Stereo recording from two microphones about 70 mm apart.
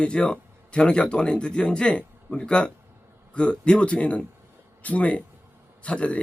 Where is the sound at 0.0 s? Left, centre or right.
Centre.